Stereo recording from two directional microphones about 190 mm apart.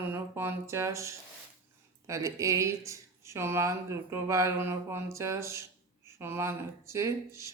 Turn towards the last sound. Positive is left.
turn(degrees=-15)  # may be behind; listen again after turning